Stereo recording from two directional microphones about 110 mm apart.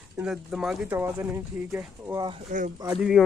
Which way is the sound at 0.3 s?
5° right (ahead or behind).